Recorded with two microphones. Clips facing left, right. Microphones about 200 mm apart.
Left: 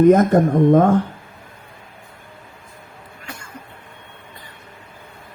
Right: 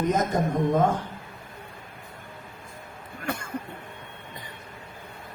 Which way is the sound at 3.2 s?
55° right (ahead or behind).